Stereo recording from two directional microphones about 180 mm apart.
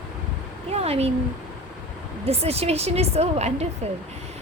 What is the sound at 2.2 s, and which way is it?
Speech, 35° right (ahead or behind).